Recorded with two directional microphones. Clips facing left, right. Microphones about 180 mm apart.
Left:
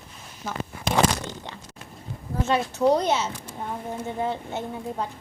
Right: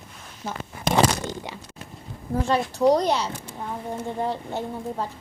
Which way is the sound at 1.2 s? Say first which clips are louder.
Right 4 dB; 10° right (ahead or behind).